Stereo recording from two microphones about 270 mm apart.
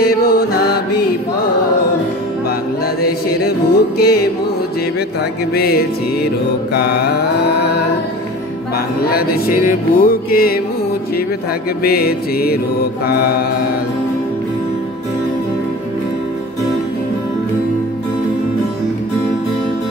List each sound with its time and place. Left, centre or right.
0.0 s music: left
3.0 s music: left
5.5 s music: left
9.1 s music: left
11.8 s music: left